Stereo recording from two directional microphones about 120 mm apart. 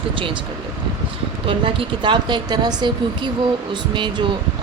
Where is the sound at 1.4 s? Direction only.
50° right (ahead or behind).